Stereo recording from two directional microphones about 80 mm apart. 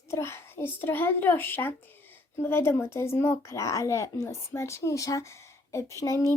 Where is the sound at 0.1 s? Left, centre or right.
Left.